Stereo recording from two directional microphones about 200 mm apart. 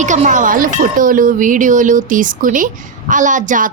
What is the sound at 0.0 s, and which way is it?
A woman's voice, 35° right (ahead or behind).